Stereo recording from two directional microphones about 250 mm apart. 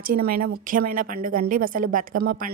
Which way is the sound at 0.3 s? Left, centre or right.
Right.